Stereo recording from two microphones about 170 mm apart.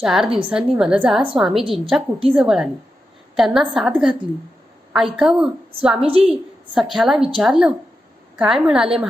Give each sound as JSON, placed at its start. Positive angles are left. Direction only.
{"t": 0.0, "sound": "a woman's voice", "side_deg": 0}
{"t": 0.3, "sound": "a woman's voice", "side_deg": -30}
{"t": 0.8, "sound": "a woman's voice", "side_deg": -5}
{"t": 6.0, "sound": "a woman's voice", "side_deg": -35}
{"t": 6.7, "sound": "a woman's voice", "side_deg": 0}